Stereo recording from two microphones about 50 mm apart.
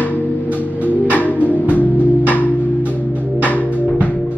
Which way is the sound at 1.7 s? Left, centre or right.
Left.